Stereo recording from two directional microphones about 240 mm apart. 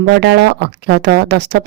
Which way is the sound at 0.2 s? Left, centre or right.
Right.